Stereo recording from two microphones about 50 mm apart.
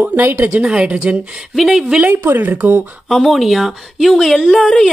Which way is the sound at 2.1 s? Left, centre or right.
Right.